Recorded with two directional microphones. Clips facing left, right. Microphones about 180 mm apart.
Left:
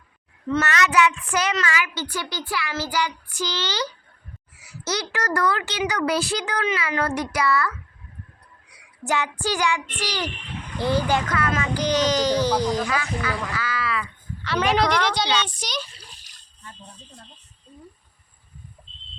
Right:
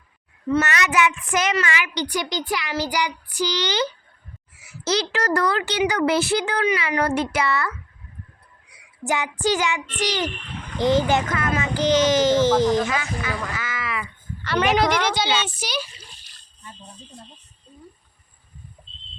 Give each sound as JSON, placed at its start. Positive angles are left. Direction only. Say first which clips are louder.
{"t": 0.5, "sound": "a child's voice", "louder": "even", "side_deg": -15}
{"t": 4.8, "sound": "speech", "louder": "right 4 dB", "side_deg": -30}
{"t": 9.0, "sound": "speech", "louder": "right 2 dB", "side_deg": -15}
{"t": 14.4, "sound": "speech", "louder": "right 1 dB", "side_deg": 0}
{"t": 18.8, "sound": "a sound", "louder": "right 1 dB", "side_deg": 0}